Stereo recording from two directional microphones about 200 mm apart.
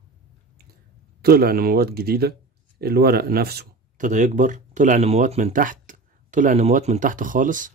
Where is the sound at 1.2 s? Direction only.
50° right (ahead or behind).